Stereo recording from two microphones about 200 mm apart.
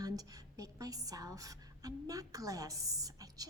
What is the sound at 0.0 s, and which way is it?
A woman's voice, 20° right (ahead or behind).